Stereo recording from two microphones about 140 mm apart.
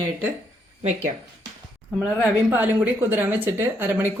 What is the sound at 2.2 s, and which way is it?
Speech, 15° right (ahead or behind).